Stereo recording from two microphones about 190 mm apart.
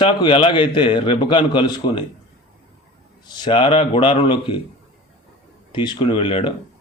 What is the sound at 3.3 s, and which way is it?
A man's voice, 25° left (ahead or behind).